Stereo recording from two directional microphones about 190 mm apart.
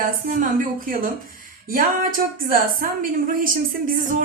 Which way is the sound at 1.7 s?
45° right (ahead or behind).